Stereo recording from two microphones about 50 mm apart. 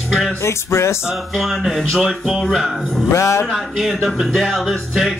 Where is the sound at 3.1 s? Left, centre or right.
Left.